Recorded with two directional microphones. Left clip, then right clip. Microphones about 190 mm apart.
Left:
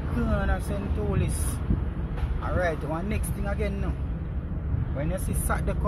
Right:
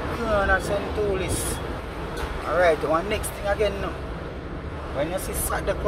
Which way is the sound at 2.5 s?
15° left (ahead or behind).